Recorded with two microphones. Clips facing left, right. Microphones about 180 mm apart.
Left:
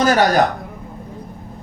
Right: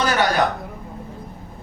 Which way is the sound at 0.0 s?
40° left (ahead or behind).